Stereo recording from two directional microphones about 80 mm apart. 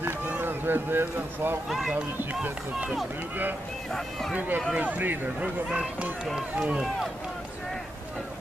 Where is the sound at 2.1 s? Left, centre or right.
Right.